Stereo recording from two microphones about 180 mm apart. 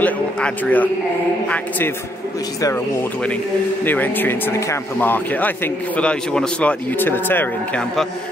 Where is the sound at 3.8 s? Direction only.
10° left (ahead or behind).